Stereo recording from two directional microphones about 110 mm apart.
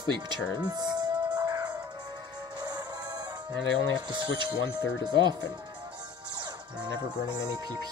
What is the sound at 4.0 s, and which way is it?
Speech, 40° right (ahead or behind).